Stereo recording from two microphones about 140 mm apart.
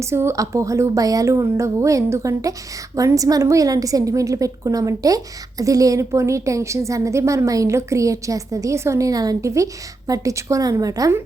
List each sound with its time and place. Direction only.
0.0 s a woman's voice: 20° right (ahead or behind)